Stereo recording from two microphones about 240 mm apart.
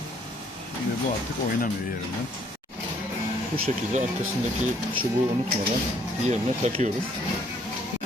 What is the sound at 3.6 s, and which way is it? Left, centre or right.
Speech, right.